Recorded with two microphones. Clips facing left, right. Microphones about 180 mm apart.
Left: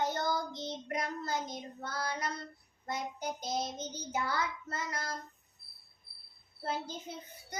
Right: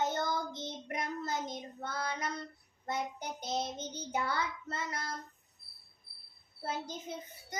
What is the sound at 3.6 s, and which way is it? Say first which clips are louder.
Child singing: even; 60° right (ahead or behind).